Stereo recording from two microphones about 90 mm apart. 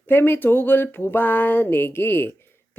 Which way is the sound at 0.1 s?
25° left (ahead or behind).